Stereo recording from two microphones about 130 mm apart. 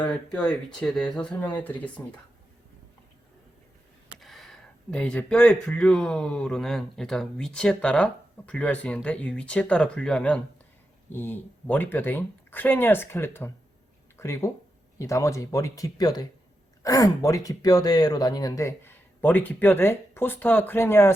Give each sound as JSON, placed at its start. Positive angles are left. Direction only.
{"t": 0.3, "sound": "speech", "side_deg": 10}
{"t": 4.1, "sound": "speech", "side_deg": 0}